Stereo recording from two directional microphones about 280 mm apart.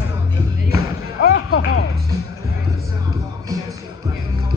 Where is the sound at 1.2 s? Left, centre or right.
Left.